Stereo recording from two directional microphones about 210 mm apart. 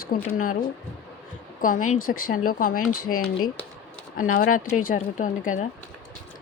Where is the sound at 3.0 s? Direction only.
90° left.